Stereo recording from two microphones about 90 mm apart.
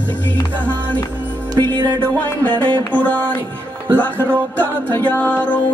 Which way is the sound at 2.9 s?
15° left (ahead or behind).